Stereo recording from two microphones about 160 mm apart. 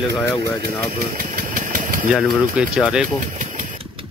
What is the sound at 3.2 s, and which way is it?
Engine, 55° right (ahead or behind).